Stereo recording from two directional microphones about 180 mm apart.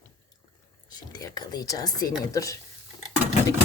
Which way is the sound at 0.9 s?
20° left (ahead or behind).